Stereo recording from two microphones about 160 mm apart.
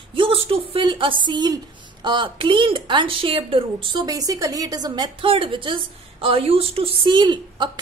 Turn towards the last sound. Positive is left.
turn(degrees=-30)  # may be behind; listen again after turning